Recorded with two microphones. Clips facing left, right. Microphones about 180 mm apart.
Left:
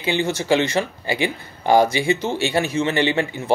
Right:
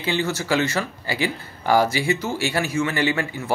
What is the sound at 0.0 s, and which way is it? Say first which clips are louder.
Speech: left 2 dB; 20° left (ahead or behind).